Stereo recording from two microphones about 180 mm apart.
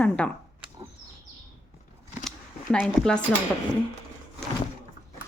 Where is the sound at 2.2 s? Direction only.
5° left (ahead or behind).